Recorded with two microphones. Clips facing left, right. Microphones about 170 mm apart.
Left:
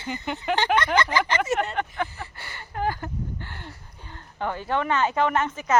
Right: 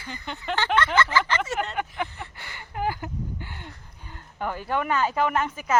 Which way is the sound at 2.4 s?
15° right (ahead or behind).